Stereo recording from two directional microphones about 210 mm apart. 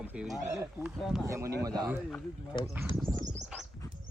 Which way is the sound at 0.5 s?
15° right (ahead or behind).